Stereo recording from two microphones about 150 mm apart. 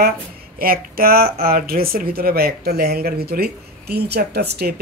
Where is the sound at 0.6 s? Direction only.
80° right.